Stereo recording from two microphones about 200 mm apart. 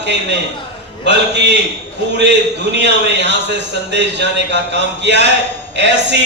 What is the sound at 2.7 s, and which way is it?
A man's voice, 60° right (ahead or behind).